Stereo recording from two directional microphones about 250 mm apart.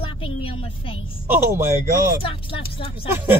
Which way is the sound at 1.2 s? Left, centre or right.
Centre.